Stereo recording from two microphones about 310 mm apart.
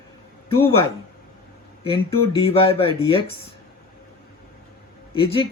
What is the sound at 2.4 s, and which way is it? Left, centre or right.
Speech, centre.